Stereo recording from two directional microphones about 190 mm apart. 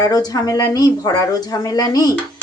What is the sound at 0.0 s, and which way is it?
Speech, 20° left (ahead or behind).